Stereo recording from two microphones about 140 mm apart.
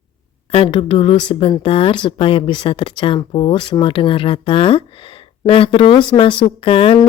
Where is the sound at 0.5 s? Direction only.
40° left (ahead or behind).